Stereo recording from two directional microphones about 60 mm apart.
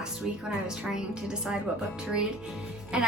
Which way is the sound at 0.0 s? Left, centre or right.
Centre.